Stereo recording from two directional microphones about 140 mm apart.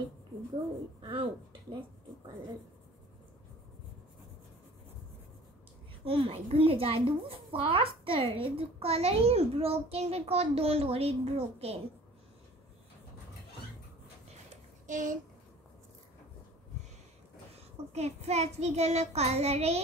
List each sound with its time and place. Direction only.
1.0 s speech: 40° right (ahead or behind)
6.0 s a woman's voice: 40° right (ahead or behind)
14.5 s a sound: 65° right (ahead or behind)
17.9 s a child's voice: 50° right (ahead or behind)